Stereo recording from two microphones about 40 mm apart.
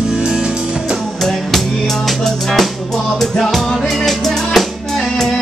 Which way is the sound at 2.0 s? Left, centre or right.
Centre.